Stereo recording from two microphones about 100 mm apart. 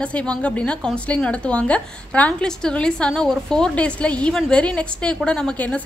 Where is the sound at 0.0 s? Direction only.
10° left (ahead or behind).